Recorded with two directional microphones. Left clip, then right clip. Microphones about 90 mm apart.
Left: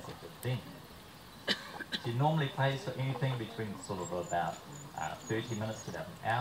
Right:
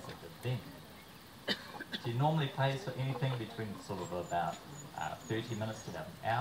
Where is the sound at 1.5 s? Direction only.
35° left (ahead or behind).